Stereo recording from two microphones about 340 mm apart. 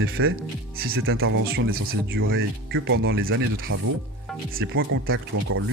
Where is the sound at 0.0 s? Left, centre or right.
Right.